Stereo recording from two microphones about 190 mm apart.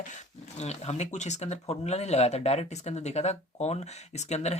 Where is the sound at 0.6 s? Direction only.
35° left (ahead or behind).